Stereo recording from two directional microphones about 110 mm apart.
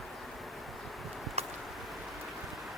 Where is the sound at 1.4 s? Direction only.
75° right (ahead or behind).